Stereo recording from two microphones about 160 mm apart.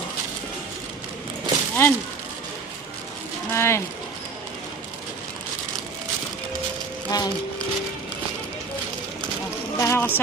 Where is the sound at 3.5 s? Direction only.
15° left (ahead or behind).